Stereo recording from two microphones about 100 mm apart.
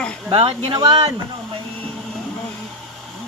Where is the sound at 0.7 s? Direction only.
50° right (ahead or behind).